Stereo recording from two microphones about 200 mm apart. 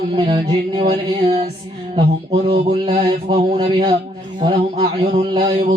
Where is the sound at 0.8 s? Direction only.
25° right (ahead or behind).